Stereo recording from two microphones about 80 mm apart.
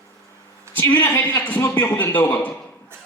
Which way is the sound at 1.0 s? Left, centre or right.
Left.